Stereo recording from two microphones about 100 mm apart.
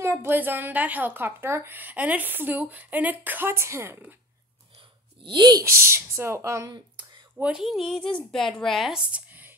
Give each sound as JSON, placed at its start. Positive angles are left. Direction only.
{"t": 0.0, "sound": "a woman's voice", "side_deg": -25}
{"t": 5.2, "sound": "speech", "side_deg": -50}
{"t": 5.7, "sound": "a woman's voice", "side_deg": -25}
{"t": 6.7, "sound": "a sound", "side_deg": -50}
{"t": 7.3, "sound": "speech", "side_deg": -10}